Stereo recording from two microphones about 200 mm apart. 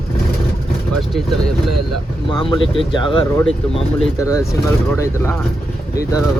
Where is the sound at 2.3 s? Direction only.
25° left (ahead or behind).